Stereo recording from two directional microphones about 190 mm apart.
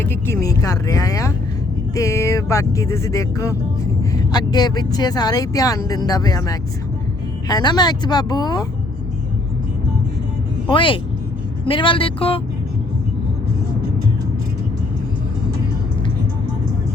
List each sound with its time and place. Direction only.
0.0 s music: 10° left (ahead or behind)
4.1 s speech: 20° left (ahead or behind)
10.7 s speech: 25° left (ahead or behind)